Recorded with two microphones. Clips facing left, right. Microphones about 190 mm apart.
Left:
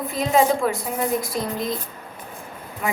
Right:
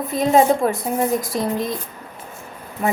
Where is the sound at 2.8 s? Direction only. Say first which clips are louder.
Right 5 dB; 35° right (ahead or behind).